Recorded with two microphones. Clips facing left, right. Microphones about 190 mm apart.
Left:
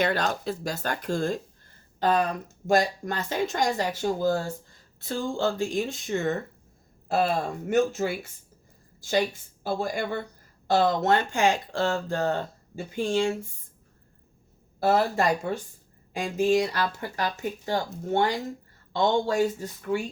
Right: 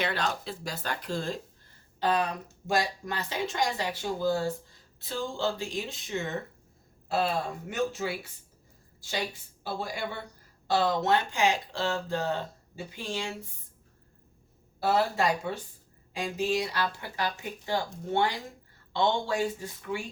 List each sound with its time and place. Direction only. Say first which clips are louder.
0.0 s speech: left 5 dB; 45° left (ahead or behind)
7.7 s a woman's voice: left 8 dB; 45° left (ahead or behind)
14.8 s speech: left 3 dB; 50° left (ahead or behind)